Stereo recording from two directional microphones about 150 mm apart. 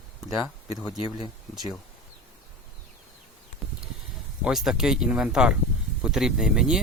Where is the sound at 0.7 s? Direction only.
Centre (ahead or behind).